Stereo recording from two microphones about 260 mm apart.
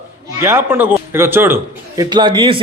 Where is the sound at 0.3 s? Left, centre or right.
Centre.